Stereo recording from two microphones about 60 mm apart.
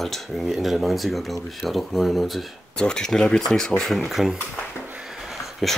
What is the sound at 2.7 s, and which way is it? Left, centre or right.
Speech, centre.